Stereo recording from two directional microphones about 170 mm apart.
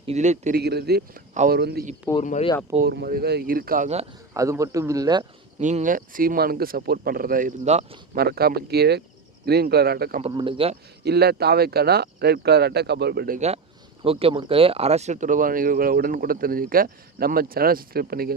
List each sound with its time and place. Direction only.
0.0 s a man's voice: 40° right (ahead or behind)
0.5 s speech: 70° right (ahead or behind)
2.2 s speech: 45° left (ahead or behind)
2.8 s speech: 65° right (ahead or behind)
4.4 s speech: 20° right (ahead or behind)
5.5 s speech: 45° right (ahead or behind)
8.1 s speech: 65° right (ahead or behind)
10.2 s speech: 35° right (ahead or behind)
11.0 s speech: 70° right (ahead or behind)
14.0 s speech: 35° right (ahead or behind); by 18.3 s 60° right (ahead or behind)